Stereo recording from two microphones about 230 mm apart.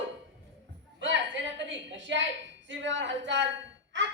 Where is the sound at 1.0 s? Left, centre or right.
Right.